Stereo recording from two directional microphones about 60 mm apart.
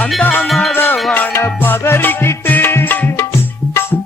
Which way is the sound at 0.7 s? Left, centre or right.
Left.